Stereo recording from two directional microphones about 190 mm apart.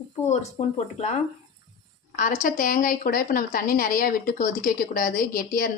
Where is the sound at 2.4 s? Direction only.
45° left (ahead or behind).